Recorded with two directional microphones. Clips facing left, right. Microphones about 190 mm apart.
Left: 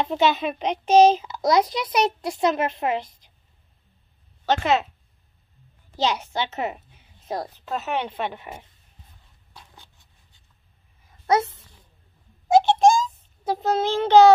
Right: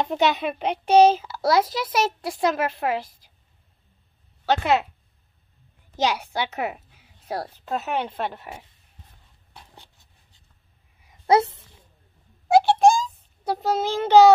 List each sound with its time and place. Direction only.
0.0 s a child's voice: 10° right (ahead or behind)
4.5 s a child's voice: 10° right (ahead or behind)
6.2 s a child's voice: 10° right (ahead or behind)
11.2 s a woman's voice: 30° right (ahead or behind)
12.5 s a sound: 10° right (ahead or behind)
13.4 s a child's voice: 5° right (ahead or behind)